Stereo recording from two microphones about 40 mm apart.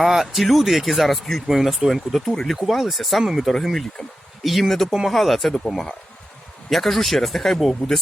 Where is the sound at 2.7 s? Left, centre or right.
Centre.